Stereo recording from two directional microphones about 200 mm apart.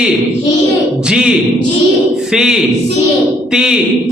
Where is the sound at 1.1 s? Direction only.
5° right (ahead or behind).